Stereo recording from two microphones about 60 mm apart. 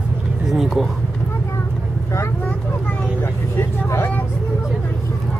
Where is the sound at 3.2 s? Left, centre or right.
Left.